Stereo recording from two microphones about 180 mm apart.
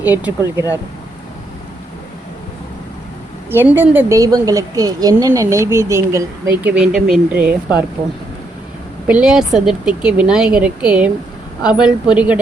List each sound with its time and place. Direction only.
0.0 s speech: 10° right (ahead or behind)
3.5 s a woman's voice: 10° right (ahead or behind)
6.7 s speech: 5° right (ahead or behind)
9.0 s speech: 5° right (ahead or behind)